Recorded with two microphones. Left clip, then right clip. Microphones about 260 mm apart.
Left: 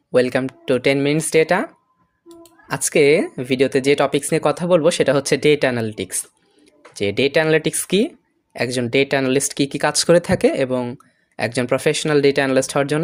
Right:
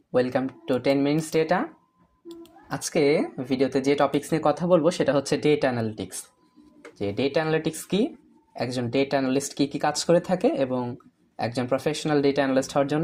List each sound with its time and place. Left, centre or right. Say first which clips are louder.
0.1 s speech: left 7 dB; left
2.6 s speech: left 8 dB; left